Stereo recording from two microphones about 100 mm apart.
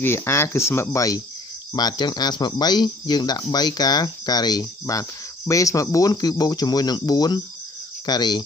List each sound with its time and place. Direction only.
0.0 s speech: 25° left (ahead or behind); by 8.4 s 45° left (ahead or behind)